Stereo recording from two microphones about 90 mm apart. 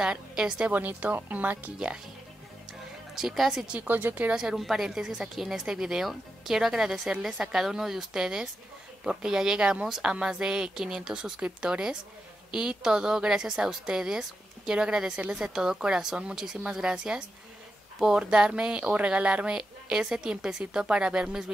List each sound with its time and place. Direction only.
0.0 s speech: 10° right (ahead or behind)
3.2 s speech: centre (ahead or behind); by 4.4 s 20° right (ahead or behind)
4.4 s speech: 5° right (ahead or behind)